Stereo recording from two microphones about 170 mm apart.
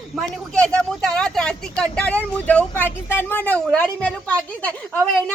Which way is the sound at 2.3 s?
10° left (ahead or behind).